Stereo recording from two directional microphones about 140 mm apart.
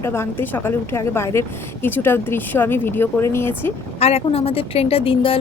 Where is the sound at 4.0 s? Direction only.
45° left (ahead or behind).